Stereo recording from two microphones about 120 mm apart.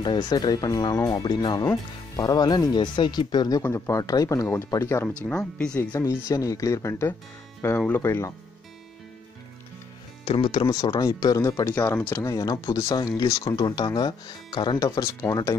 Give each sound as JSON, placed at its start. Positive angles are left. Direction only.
{"t": 0.0, "sound": "speech", "side_deg": 35}
{"t": 3.6, "sound": "speech", "side_deg": 25}
{"t": 5.3, "sound": "speech", "side_deg": 5}
{"t": 5.9, "sound": "speech", "side_deg": 25}
{"t": 7.6, "sound": "speech", "side_deg": 15}
{"t": 10.2, "sound": "speech", "side_deg": 40}